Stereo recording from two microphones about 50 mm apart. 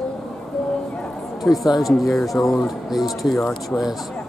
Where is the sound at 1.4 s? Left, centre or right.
Centre.